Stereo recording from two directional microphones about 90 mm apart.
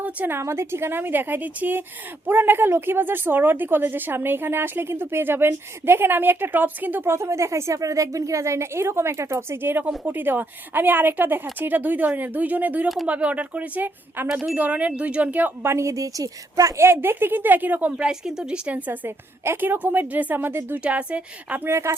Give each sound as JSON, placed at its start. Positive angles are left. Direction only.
{"t": 0.0, "sound": "speech", "side_deg": -20}
{"t": 14.3, "sound": "speech", "side_deg": -5}
{"t": 14.5, "sound": "speech", "side_deg": -15}
{"t": 15.7, "sound": "speech", "side_deg": -35}
{"t": 21.7, "sound": "speech", "side_deg": -30}